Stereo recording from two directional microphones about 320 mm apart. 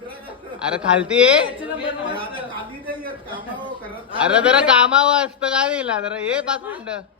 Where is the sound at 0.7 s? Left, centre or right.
Centre.